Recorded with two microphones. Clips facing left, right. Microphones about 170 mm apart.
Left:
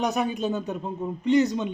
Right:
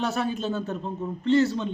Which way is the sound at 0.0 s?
15° left (ahead or behind).